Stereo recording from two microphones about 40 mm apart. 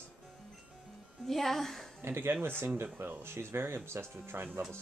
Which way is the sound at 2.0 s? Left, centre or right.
Right.